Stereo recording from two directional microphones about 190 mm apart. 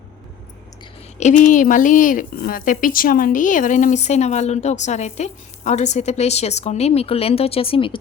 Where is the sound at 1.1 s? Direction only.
40° left (ahead or behind).